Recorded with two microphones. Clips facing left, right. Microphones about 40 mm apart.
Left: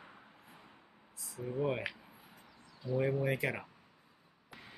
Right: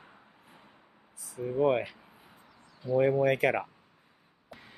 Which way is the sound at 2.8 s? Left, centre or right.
Centre.